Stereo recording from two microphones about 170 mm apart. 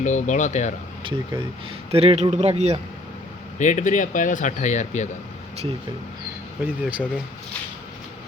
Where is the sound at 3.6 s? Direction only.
45° left (ahead or behind).